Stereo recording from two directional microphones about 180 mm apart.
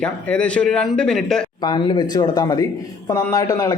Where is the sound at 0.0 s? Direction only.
5° left (ahead or behind).